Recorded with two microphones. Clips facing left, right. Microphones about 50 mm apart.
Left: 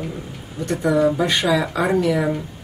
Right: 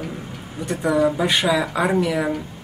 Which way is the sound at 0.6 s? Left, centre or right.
Centre.